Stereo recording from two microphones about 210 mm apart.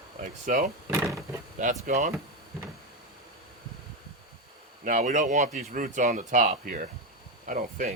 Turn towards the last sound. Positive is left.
turn(degrees=-40)  # may be behind; listen again after turning